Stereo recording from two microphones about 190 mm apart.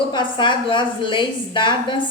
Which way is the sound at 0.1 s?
25° left (ahead or behind).